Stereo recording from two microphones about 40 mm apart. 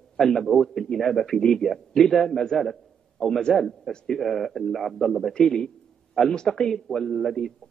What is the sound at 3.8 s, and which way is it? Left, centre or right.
Speech, centre.